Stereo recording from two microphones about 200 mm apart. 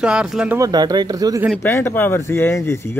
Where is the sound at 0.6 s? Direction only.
20° right (ahead or behind).